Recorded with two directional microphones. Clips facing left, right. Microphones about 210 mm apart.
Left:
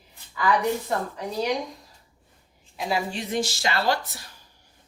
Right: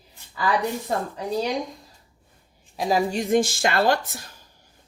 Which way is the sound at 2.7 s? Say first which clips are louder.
Right 5 dB; 40° right (ahead or behind).